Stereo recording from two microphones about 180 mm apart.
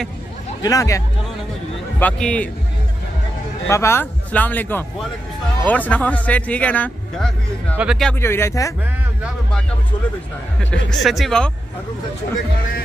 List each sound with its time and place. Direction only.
0.6 s speech: 20° left (ahead or behind)
2.0 s speech: 5° left (ahead or behind)
3.6 s speech: 15° left (ahead or behind); by 8.1 s 5° right (ahead or behind)
8.1 s speech: 15° left (ahead or behind)
10.7 s speech: centre (ahead or behind)